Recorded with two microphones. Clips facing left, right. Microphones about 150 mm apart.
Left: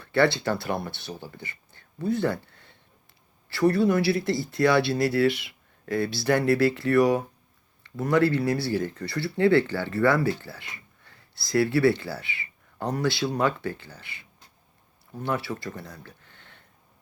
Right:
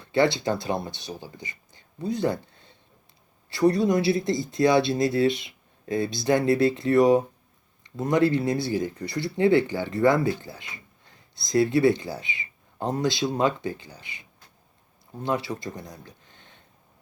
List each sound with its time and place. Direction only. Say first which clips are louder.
0.0 s speech: even; 20° right (ahead or behind)